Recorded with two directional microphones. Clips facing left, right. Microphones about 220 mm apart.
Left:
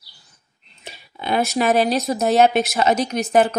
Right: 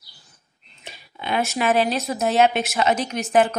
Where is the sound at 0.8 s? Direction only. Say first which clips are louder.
Left 4 dB; 40° left (ahead or behind).